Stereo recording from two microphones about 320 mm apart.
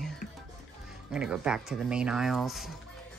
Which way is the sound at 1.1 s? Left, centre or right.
Centre.